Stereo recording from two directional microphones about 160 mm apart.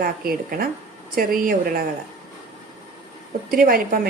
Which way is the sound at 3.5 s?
65° right (ahead or behind).